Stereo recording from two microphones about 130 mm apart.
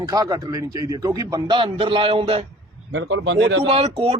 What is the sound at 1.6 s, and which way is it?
Speech, 40° right (ahead or behind).